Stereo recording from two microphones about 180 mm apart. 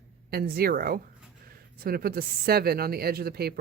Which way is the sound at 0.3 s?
60° right (ahead or behind).